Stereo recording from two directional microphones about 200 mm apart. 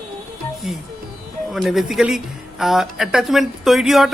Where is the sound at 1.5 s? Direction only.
Centre (ahead or behind).